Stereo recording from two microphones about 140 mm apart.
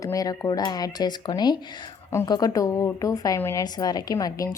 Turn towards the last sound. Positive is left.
turn(degrees=25)  # may be behind; listen again after turning